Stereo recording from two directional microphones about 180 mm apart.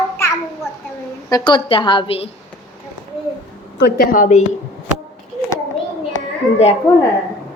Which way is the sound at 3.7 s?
60° left (ahead or behind).